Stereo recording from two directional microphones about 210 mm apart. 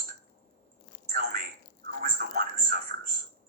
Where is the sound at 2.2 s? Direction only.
45° right (ahead or behind).